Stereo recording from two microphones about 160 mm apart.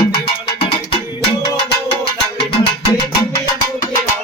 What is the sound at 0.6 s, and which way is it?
Music, 35° left (ahead or behind).